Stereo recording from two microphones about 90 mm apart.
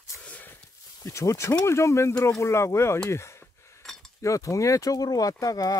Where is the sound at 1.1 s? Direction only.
35° left (ahead or behind).